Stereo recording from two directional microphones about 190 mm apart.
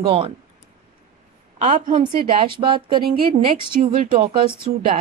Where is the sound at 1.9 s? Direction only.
25° right (ahead or behind).